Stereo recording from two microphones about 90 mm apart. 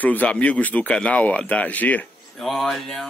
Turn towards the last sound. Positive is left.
turn(degrees=5)  # may be behind; listen again after turning